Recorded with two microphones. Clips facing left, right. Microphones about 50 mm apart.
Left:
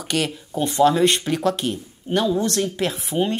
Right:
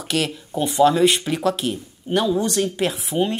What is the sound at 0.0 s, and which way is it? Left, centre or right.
Speech, centre.